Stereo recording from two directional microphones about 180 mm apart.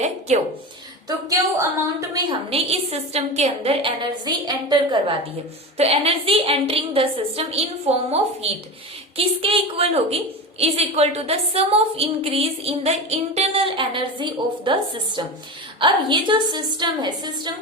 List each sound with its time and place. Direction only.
1.0 s a woman's voice: 20° right (ahead or behind)
2.5 s a woman's voice: 35° right (ahead or behind)
5.7 s a woman's voice: 35° right (ahead or behind)